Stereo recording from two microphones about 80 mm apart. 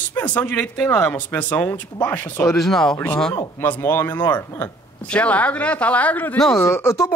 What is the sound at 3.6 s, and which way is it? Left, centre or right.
Speech, left.